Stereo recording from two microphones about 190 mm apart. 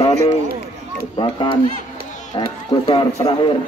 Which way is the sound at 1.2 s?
25° left (ahead or behind).